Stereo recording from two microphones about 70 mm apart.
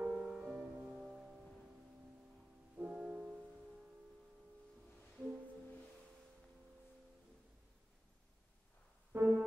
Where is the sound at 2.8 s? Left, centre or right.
Right.